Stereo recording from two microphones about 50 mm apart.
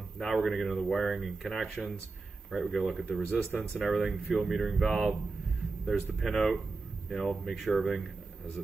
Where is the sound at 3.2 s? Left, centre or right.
Left.